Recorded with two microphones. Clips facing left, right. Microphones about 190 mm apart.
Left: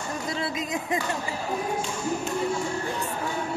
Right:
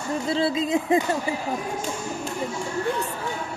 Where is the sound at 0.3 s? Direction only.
30° right (ahead or behind).